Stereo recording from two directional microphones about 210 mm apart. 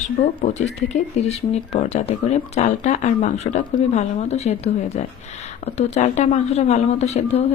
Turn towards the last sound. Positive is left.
turn(degrees=30)  # may be behind; listen again after turning